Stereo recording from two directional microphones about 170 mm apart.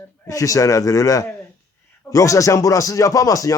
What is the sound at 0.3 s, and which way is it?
Speech, 20° left (ahead or behind).